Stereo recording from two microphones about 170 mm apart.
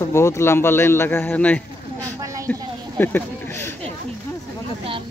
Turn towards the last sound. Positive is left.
turn(degrees=10)  # may be behind; listen again after turning